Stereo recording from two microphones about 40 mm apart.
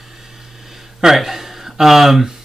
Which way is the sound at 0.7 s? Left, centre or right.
Centre.